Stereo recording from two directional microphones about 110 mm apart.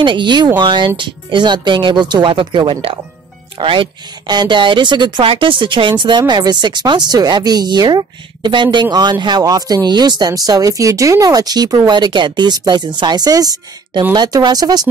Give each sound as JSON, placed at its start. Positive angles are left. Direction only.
{"t": 0.0, "sound": "speech", "side_deg": -45}
{"t": 5.2, "sound": "speech", "side_deg": -55}